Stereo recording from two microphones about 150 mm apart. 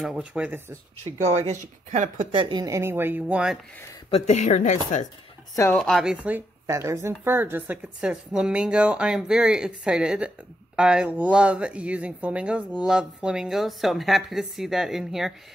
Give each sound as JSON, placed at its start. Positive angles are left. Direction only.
{"t": 0.0, "sound": "speech", "side_deg": -5}
{"t": 1.1, "sound": "speech", "side_deg": -50}
{"t": 2.3, "sound": "speech", "side_deg": -30}
{"t": 4.1, "sound": "speech", "side_deg": 50}
{"t": 5.8, "sound": "speech", "side_deg": 0}
{"t": 6.7, "sound": "speech", "side_deg": -20}